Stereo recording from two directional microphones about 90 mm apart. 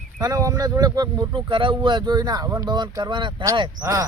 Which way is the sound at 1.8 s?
55° right (ahead or behind).